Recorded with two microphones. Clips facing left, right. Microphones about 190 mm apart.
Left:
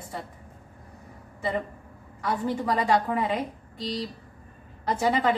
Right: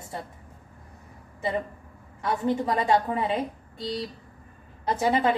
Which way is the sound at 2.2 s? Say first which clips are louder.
Right 1 dB; 25° right (ahead or behind).